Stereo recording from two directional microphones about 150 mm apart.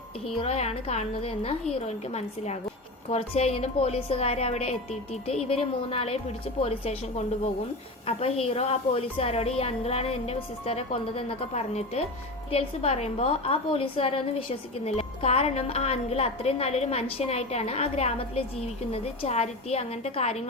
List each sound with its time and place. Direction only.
0.3 s a woman's voice: 45° left (ahead or behind)
8.0 s a woman's voice: 40° left (ahead or behind)